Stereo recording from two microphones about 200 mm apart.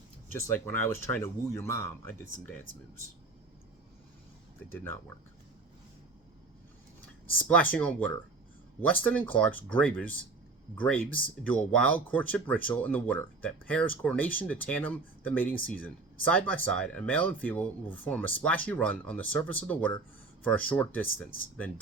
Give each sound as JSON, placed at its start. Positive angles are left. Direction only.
{"t": 0.3, "sound": "speech", "side_deg": 10}
{"t": 4.7, "sound": "speech", "side_deg": 10}
{"t": 7.3, "sound": "speech", "side_deg": 5}